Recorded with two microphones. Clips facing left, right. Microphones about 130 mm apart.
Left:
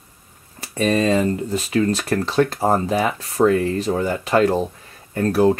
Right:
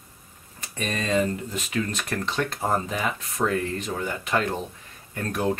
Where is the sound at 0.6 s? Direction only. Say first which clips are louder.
Left 11 dB; 35° left (ahead or behind).